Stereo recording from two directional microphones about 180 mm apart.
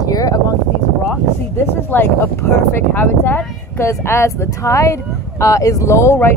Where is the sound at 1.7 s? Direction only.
10° left (ahead or behind).